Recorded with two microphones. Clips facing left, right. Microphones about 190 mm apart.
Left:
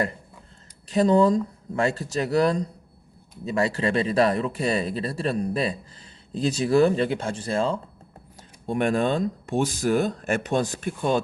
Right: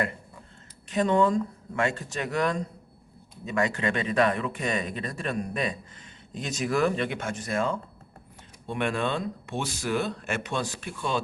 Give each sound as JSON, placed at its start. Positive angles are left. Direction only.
{"t": 0.9, "sound": "speech", "side_deg": 35}